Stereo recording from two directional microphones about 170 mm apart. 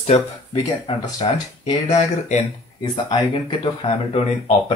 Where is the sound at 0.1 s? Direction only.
40° left (ahead or behind).